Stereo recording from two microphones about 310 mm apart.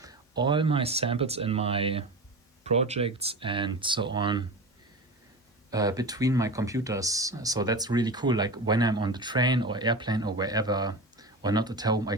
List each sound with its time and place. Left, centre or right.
0.0 s speech: centre
5.7 s speech: centre